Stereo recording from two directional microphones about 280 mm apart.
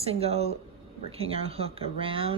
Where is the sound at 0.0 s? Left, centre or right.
Right.